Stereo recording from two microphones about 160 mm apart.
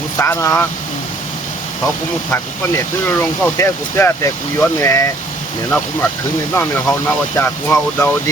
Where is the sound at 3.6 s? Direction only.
15° left (ahead or behind).